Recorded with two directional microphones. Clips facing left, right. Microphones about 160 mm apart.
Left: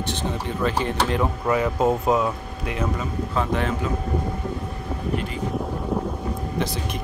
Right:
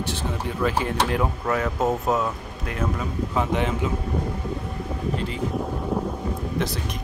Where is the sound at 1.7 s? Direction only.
15° left (ahead or behind).